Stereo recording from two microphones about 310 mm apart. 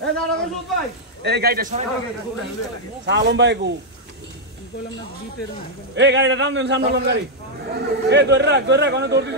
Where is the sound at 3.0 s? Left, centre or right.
Right.